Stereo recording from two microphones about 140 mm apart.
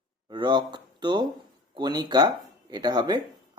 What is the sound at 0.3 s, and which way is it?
Speech, 30° right (ahead or behind).